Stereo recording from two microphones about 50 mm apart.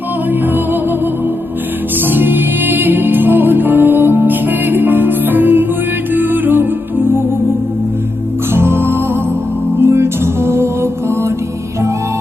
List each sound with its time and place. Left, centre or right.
2.0 s music: right
8.5 s music: right